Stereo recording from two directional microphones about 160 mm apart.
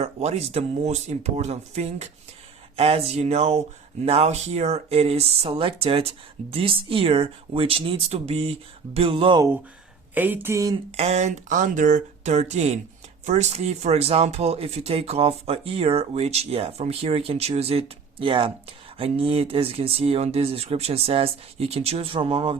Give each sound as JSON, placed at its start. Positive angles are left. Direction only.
{"t": 0.0, "sound": "speech", "side_deg": -40}
{"t": 10.2, "sound": "speech", "side_deg": -10}
{"t": 10.9, "sound": "speech", "side_deg": -45}